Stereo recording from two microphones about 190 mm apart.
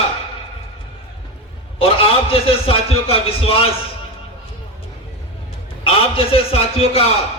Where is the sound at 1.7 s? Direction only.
30° left (ahead or behind).